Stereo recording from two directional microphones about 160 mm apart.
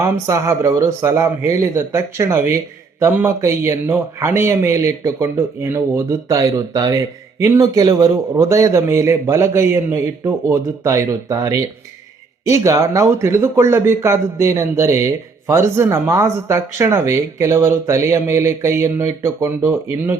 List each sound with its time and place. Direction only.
0.0 s speech: 20° right (ahead or behind)